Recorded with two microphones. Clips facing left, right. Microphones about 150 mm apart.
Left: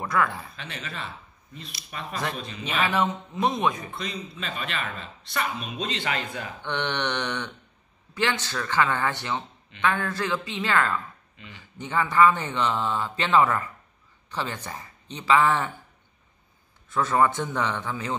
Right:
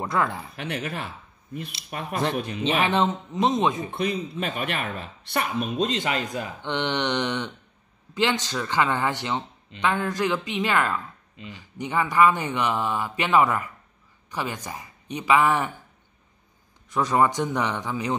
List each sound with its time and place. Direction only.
0.0 s speech: 20° right (ahead or behind)
0.6 s speech: 60° right (ahead or behind)
2.8 s speech: 25° right (ahead or behind)
3.9 s speech: 60° right (ahead or behind)
5.8 s speech: 45° right (ahead or behind)
6.6 s speech: 20° right (ahead or behind)
16.9 s speech: 15° right (ahead or behind)